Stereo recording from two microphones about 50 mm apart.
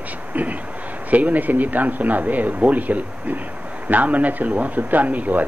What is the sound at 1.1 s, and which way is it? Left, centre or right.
Speech, right.